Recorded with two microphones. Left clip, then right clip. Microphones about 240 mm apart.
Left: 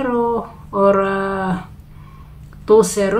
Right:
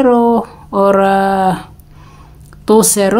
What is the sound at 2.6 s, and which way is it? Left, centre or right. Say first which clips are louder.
Female singing: right 2 dB; right.